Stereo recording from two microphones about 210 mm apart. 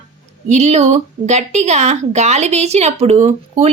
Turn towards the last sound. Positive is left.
turn(degrees=-35)  # may be behind; listen again after turning